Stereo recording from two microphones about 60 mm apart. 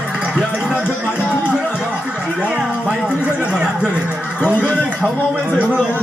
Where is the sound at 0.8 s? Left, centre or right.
Left.